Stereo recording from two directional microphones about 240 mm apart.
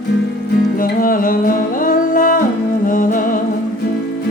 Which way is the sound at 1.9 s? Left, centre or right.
Left.